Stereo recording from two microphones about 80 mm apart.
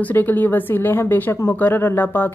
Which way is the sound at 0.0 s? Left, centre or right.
Left.